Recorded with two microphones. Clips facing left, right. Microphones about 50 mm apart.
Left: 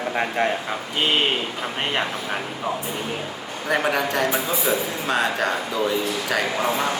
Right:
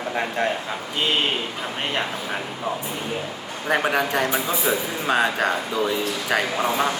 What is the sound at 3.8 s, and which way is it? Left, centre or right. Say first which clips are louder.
A man's voice: even; centre.